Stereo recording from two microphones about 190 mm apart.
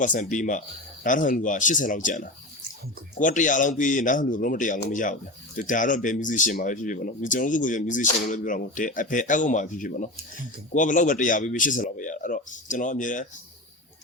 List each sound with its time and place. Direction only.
0.0 s speech: 40° left (ahead or behind)